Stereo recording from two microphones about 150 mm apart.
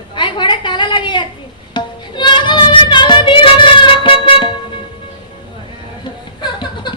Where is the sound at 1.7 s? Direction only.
30° left (ahead or behind).